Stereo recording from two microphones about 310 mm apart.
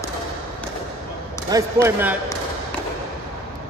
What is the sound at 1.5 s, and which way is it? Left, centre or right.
Speech, centre.